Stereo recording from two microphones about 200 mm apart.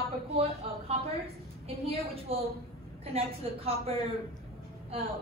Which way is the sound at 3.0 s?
30° right (ahead or behind).